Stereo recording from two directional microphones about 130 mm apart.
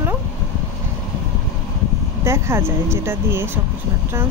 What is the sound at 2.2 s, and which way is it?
Speech, 20° right (ahead or behind).